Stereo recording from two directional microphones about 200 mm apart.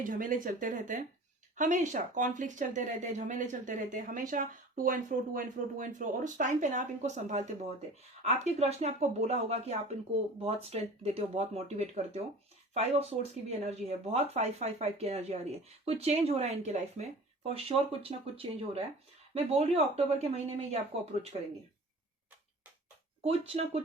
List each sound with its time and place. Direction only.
0.0 s speech: 40° right (ahead or behind)
23.2 s speech: 30° right (ahead or behind)